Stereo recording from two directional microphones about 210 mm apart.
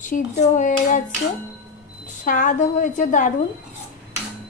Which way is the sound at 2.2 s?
40° left (ahead or behind).